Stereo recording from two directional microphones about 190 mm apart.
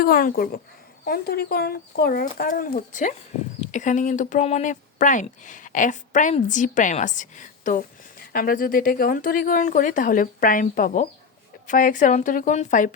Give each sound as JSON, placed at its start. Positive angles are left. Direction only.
{"t": 0.0, "sound": "speech", "side_deg": 50}